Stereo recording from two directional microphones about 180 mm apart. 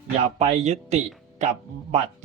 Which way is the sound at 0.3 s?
40° right (ahead or behind).